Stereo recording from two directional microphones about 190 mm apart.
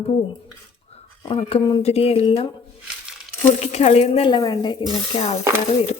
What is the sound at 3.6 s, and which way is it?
A woman's voice, 35° left (ahead or behind).